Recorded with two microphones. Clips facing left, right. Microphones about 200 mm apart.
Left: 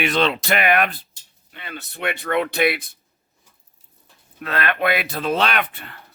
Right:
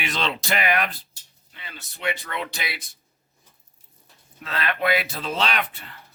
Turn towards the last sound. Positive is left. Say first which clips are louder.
# left 3 dB
turn(degrees=60)  # may be behind; listen again after turning